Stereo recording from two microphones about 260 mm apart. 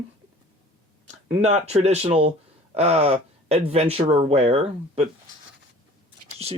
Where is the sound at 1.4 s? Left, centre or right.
Right.